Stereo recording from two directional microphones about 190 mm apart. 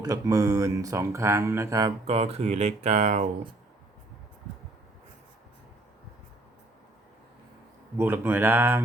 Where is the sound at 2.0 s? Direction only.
30° right (ahead or behind).